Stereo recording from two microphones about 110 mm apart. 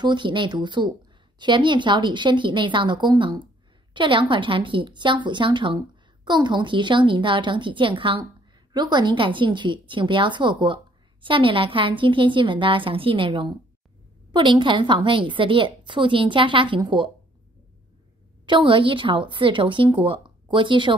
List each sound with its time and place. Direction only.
0.0 s a woman's voice: 45° right (ahead or behind)
18.4 s a woman's voice: 50° right (ahead or behind)